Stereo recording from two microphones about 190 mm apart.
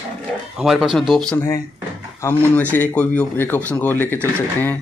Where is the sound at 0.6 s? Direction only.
5° right (ahead or behind).